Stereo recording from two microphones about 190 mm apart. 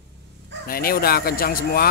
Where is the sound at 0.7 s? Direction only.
50° left (ahead or behind).